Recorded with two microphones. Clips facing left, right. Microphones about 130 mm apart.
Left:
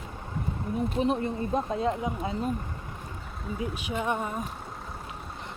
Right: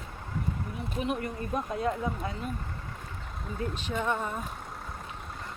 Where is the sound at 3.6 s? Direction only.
10° left (ahead or behind).